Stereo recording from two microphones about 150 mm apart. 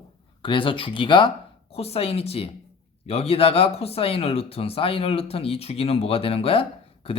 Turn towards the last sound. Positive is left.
turn(degrees=40)  # may be behind; listen again after turning